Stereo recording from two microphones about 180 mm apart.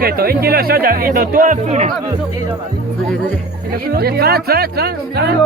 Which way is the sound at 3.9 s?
60° right (ahead or behind).